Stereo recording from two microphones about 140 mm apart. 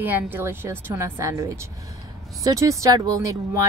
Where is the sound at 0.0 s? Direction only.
15° right (ahead or behind).